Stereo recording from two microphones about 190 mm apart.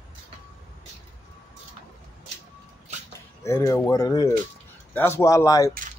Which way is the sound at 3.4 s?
15° left (ahead or behind).